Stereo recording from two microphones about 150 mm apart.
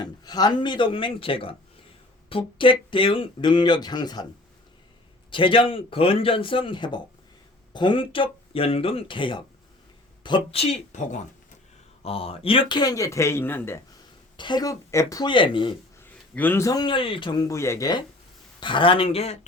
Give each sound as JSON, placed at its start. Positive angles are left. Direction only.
{"t": 0.0, "sound": "speech", "side_deg": 25}
{"t": 5.3, "sound": "speech", "side_deg": 35}
{"t": 12.0, "sound": "speech", "side_deg": 40}
{"t": 14.3, "sound": "speech", "side_deg": 30}
{"t": 16.0, "sound": "a man's voice", "side_deg": 10}